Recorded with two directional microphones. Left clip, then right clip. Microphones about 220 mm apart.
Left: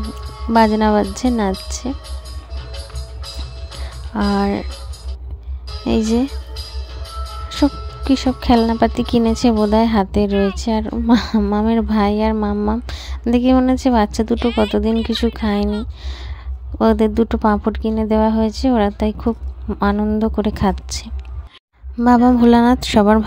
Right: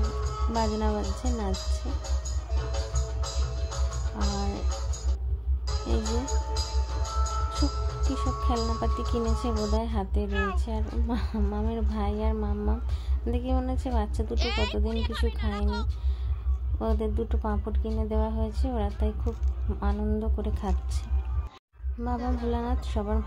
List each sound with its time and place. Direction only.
0.6 s speech: 45° left (ahead or behind)
2.7 s music: 35° right (ahead or behind)
4.4 s speech: 40° left (ahead or behind)
6.2 s music: 35° right (ahead or behind)
8.1 s speech: 45° left (ahead or behind)
14.3 s speech: 5° right (ahead or behind)
15.0 s speech: 45° left (ahead or behind)
16.7 s speech: 50° left (ahead or behind)